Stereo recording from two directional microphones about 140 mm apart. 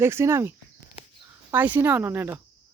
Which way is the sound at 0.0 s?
20° right (ahead or behind).